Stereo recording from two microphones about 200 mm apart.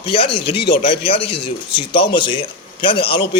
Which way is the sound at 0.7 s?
55° left (ahead or behind).